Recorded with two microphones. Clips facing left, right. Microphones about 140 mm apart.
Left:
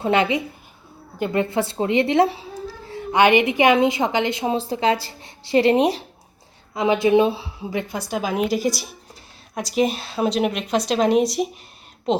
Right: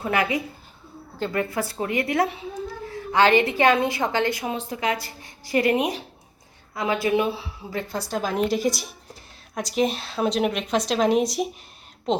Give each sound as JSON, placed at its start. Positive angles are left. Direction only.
{"t": 0.0, "sound": "a woman's voice", "side_deg": 25}
{"t": 3.1, "sound": "a woman's voice", "side_deg": 15}
{"t": 6.7, "sound": "a woman's voice", "side_deg": 20}
{"t": 7.7, "sound": "a woman's voice", "side_deg": 15}